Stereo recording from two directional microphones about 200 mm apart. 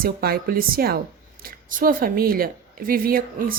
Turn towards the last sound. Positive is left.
turn(degrees=-45)  # may be behind; listen again after turning